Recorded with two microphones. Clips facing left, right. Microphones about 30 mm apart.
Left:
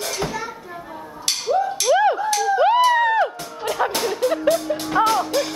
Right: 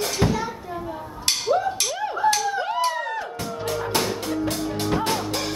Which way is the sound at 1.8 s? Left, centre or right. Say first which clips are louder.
Left 5 dB; left.